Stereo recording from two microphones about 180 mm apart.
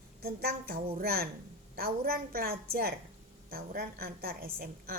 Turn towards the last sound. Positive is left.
turn(degrees=-55)  # may be behind; listen again after turning